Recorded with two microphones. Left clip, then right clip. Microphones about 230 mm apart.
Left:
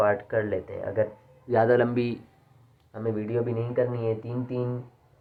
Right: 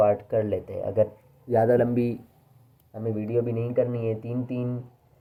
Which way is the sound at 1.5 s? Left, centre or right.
Right.